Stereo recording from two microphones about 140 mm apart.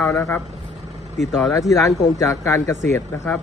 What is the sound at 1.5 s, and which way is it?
Speech, 25° left (ahead or behind).